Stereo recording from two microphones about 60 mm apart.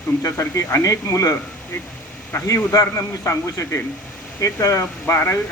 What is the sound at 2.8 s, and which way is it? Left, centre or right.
Speech, left.